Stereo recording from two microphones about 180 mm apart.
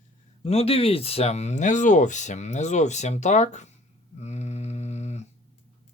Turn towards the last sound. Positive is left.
turn(degrees=40)  # may be behind; listen again after turning